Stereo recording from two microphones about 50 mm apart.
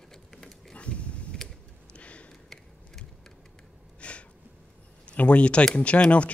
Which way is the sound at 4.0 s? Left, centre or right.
Left.